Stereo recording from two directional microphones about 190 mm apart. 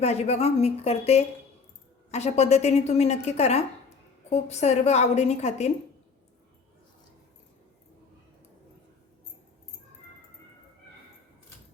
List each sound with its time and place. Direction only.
0.0 s a woman's voice: 35° left (ahead or behind)